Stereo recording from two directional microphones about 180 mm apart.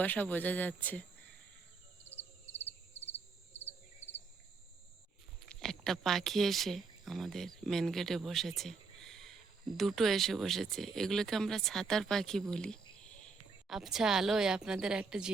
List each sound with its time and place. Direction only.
0.0 s speech: 10° left (ahead or behind)
5.5 s a woman's voice: centre (ahead or behind)